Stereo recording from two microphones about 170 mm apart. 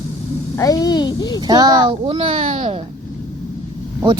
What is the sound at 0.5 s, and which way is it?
Speech, 20° left (ahead or behind).